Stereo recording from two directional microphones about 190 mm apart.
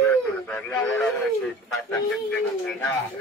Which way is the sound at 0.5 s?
10° left (ahead or behind).